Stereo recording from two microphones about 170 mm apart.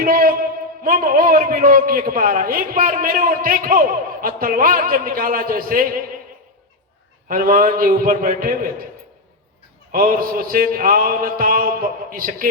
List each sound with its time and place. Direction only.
0.0 s a man's voice: 55° right (ahead or behind)
7.3 s a man's voice: 55° right (ahead or behind)
9.9 s a man's voice: 60° right (ahead or behind)